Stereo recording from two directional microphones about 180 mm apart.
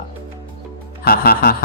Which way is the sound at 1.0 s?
60° left (ahead or behind).